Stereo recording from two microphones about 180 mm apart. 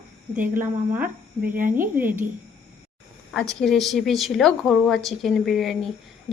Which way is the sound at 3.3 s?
Centre (ahead or behind).